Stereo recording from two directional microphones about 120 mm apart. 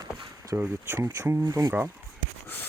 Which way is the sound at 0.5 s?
20° right (ahead or behind).